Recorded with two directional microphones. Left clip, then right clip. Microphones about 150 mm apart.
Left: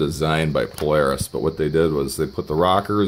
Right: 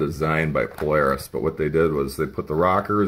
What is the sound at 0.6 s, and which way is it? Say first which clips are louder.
Speech: left 2 dB; 20° left (ahead or behind).